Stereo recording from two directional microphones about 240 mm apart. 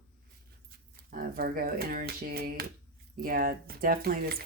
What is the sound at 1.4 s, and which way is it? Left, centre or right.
Speech, right.